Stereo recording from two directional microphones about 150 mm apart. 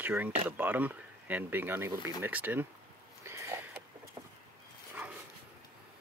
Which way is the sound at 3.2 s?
20° right (ahead or behind).